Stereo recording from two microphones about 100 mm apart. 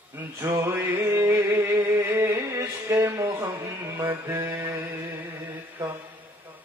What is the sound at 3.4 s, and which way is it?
Music, 30° right (ahead or behind).